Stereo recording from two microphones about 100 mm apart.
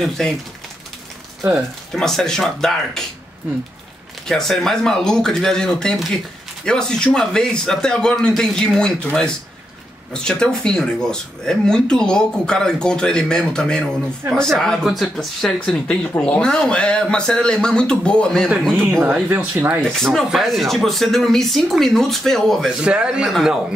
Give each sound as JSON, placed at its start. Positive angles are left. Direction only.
{"t": 2.0, "sound": "speech", "side_deg": 5}
{"t": 4.3, "sound": "speech", "side_deg": 5}
{"t": 18.8, "sound": "speech", "side_deg": -20}
{"t": 20.0, "sound": "speech", "side_deg": 0}
{"t": 22.8, "sound": "a man's voice", "side_deg": -10}